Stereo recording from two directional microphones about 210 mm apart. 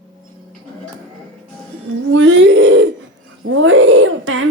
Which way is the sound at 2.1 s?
60° right (ahead or behind).